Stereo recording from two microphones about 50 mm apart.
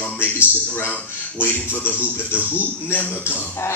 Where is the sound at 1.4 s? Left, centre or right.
Left.